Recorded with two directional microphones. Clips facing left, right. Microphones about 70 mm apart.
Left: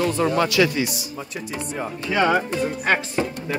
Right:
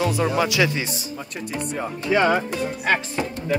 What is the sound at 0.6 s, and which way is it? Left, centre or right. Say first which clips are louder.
Speech: left 2 dB; right.